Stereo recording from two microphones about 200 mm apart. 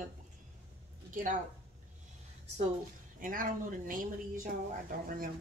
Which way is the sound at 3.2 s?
40° right (ahead or behind).